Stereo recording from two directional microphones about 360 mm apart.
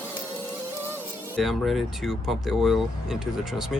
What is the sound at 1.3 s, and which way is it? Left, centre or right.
Speech, centre.